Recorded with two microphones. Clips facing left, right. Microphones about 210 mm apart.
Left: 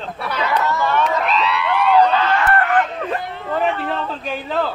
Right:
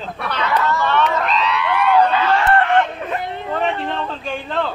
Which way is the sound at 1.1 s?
5° left (ahead or behind).